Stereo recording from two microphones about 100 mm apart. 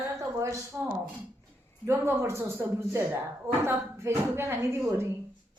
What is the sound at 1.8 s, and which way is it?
Speech, 25° right (ahead or behind).